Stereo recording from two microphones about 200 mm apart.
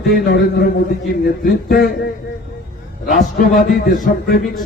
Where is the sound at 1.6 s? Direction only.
50° left (ahead or behind).